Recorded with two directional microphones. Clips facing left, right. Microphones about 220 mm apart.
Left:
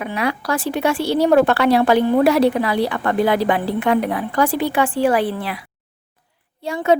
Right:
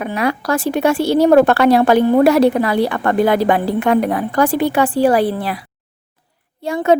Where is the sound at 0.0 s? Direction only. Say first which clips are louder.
Right 3 dB; 45° right (ahead or behind).